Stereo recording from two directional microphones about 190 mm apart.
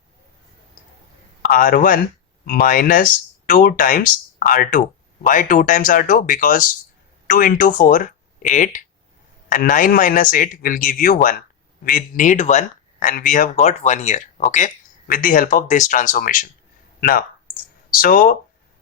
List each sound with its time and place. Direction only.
1.4 s a man's voice: 45° left (ahead or behind)